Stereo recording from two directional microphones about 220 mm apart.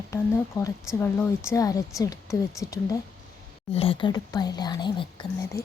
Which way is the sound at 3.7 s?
25° left (ahead or behind).